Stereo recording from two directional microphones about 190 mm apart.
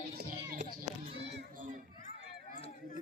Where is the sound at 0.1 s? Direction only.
55° right (ahead or behind).